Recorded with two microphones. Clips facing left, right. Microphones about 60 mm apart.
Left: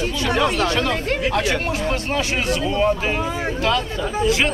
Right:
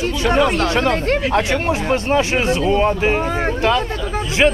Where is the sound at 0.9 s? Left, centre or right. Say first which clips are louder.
Right 5 dB; right.